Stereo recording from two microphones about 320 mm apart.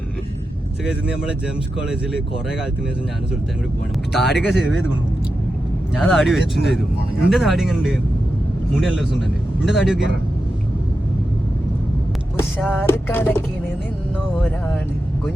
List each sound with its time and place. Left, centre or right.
0.9 s speech: centre
4.1 s speech: centre
6.0 s speech: centre
12.4 s music: centre
14.3 s speech: centre